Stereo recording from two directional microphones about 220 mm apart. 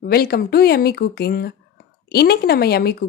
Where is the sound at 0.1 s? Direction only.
45° left (ahead or behind).